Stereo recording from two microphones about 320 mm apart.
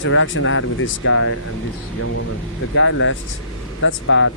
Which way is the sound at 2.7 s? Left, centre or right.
Left.